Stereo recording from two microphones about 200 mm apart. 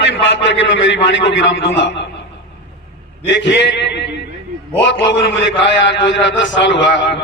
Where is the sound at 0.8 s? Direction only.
65° left (ahead or behind).